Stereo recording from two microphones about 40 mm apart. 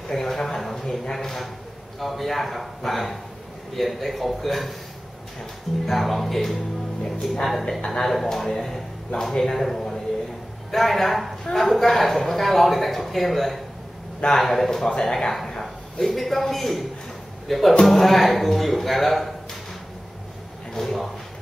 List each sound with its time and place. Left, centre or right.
0.1 s a man's voice: centre
5.9 s a man's voice: centre
7.8 s a man's voice: centre
14.9 s speech: centre
15.6 s speech: centre
20.7 s speech: centre